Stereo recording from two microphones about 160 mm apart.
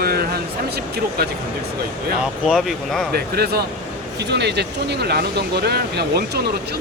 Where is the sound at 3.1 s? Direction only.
75° right (ahead or behind).